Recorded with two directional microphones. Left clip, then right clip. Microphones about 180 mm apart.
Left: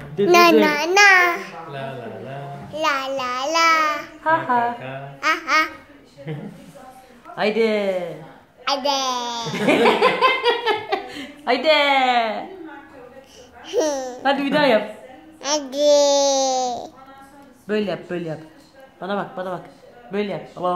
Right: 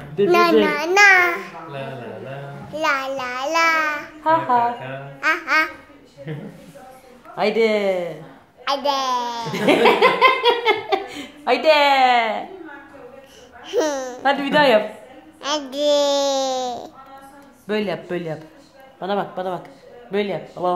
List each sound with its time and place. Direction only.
0.2 s a child's voice: 15° left (ahead or behind)
0.8 s a child's voice: centre (ahead or behind)
2.7 s a child's voice: 10° right (ahead or behind)
4.2 s a child's voice: 15° right (ahead or behind)
6.3 s laughter: 20° right (ahead or behind)
7.3 s a child's voice: 20° right (ahead or behind)
9.6 s laughter: 20° right (ahead or behind)
13.7 s a child's voice: 15° right (ahead or behind)
14.3 s laughter: 25° right (ahead or behind)
15.4 s a child's voice: 10° right (ahead or behind)
17.6 s laughter: 25° right (ahead or behind)